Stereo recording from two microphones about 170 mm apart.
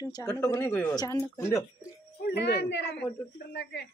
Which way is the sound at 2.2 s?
80° left.